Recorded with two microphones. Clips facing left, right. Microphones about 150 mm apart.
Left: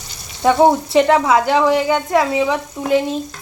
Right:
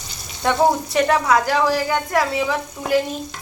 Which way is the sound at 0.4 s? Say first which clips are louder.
Left 5 dB; 25° left (ahead or behind).